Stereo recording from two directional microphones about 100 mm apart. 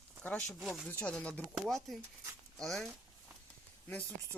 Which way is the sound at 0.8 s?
15° left (ahead or behind).